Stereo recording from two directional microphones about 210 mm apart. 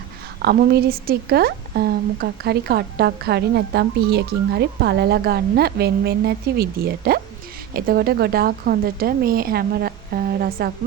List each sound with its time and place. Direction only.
0.4 s a woman's voice: 45° right (ahead or behind)